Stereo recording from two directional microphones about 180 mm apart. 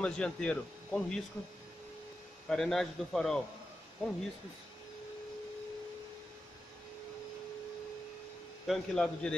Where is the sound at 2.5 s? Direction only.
Centre (ahead or behind).